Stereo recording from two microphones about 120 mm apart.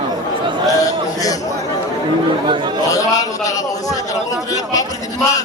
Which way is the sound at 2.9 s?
30° left (ahead or behind).